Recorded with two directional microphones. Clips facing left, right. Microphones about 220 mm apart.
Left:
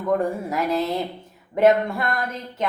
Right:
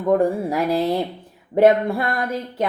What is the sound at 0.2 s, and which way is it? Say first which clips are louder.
Speech: right 4 dB; 35° right (ahead or behind).